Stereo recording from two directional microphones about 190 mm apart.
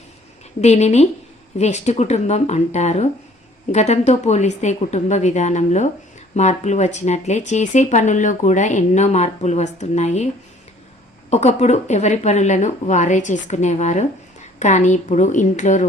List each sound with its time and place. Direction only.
0.6 s speech: 35° left (ahead or behind)
11.3 s speech: 35° left (ahead or behind)